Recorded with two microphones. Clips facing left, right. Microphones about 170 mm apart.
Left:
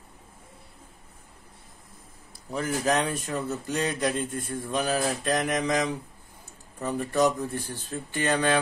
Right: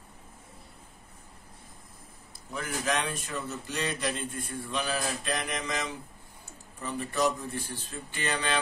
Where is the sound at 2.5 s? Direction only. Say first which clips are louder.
Left 6 dB; 40° left (ahead or behind).